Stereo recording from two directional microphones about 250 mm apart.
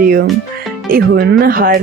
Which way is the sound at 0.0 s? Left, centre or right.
Right.